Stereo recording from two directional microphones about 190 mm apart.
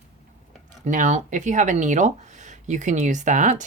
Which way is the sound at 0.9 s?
40° right (ahead or behind).